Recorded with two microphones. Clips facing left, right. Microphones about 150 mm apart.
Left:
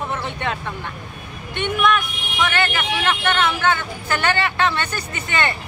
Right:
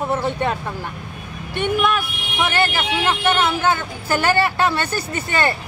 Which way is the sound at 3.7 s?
40° right (ahead or behind).